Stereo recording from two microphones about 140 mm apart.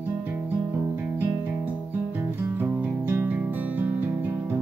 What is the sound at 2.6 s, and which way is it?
Music, 15° right (ahead or behind).